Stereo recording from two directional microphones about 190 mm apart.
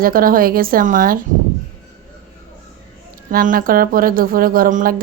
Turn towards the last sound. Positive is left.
turn(degrees=-45)  # may be behind; listen again after turning